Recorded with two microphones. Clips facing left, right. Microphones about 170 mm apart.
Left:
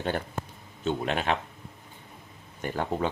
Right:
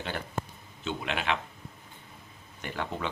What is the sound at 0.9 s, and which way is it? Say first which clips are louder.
Speech: left 4 dB; 45° left (ahead or behind).